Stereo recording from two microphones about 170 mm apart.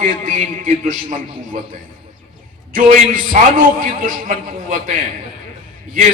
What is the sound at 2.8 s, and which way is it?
A man's voice, 55° right (ahead or behind).